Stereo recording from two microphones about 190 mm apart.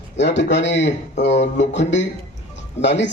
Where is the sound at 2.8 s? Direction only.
65° left (ahead or behind).